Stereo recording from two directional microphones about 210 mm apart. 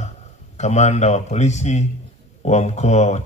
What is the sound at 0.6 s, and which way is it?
Speech, 35° left (ahead or behind).